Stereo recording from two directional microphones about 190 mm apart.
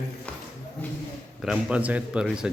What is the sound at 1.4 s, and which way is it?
A man's voice, 5° right (ahead or behind).